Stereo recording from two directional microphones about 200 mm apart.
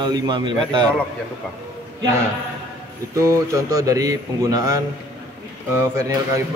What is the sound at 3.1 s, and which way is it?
Speech, 15° right (ahead or behind).